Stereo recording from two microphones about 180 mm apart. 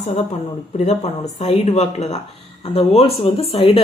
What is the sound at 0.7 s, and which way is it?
Speech, 35° left (ahead or behind).